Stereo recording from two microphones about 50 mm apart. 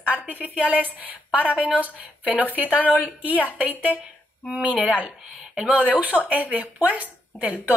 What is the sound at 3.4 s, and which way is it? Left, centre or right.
Speech, right.